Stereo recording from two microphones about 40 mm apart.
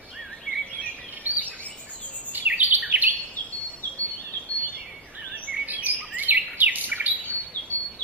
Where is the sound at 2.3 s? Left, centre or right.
Right.